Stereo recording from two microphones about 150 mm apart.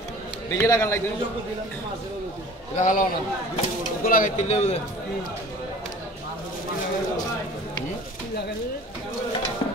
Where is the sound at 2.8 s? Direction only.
60° left (ahead or behind).